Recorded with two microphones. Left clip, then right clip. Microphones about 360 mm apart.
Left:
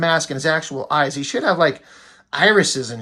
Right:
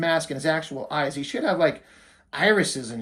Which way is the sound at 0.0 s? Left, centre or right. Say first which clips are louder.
Left 5 dB; left.